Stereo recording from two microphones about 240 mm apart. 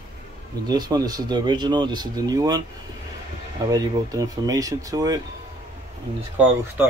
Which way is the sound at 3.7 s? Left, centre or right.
Centre.